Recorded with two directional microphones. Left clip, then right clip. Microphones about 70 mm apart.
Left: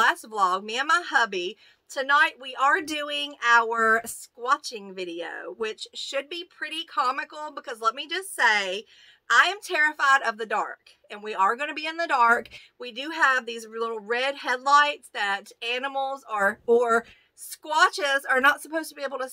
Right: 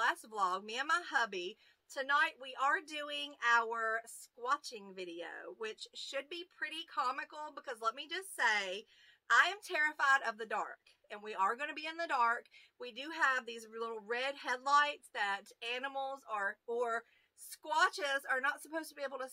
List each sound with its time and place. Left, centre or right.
0.3 s speech: centre
0.8 s speech: centre
13.7 s speech: left; by 17.0 s centre
17.5 s speech: left